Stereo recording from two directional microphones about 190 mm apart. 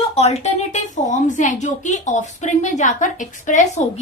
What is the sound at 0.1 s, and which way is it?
A woman's voice, 35° left (ahead or behind).